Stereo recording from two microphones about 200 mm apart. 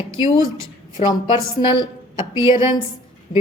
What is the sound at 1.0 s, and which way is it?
A woman's voice, 25° left (ahead or behind).